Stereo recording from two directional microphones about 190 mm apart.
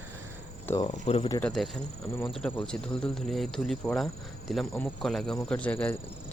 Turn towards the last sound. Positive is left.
turn(degrees=5)  # may be behind; listen again after turning